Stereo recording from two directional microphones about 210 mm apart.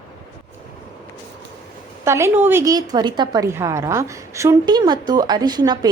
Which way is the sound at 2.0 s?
10° right (ahead or behind).